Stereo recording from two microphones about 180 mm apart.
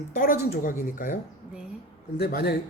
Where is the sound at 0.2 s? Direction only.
50° left (ahead or behind).